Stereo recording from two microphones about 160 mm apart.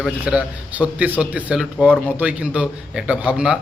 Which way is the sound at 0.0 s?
5° right (ahead or behind).